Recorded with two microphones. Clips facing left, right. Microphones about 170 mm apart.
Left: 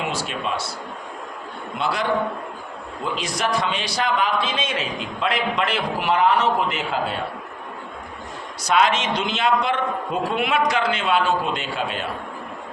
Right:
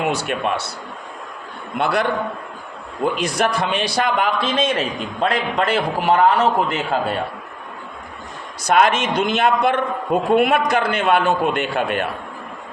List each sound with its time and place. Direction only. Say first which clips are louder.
0.1 s a man's voice: right 5 dB; 60° right (ahead or behind)
1.8 s a man's voice: right 3 dB; 60° right (ahead or behind); by 6.7 s 40° right (ahead or behind)
8.6 s a man's voice: right 3 dB; 55° right (ahead or behind)